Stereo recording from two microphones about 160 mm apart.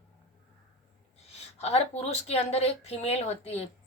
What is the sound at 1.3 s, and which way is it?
A woman's voice, 40° left (ahead or behind).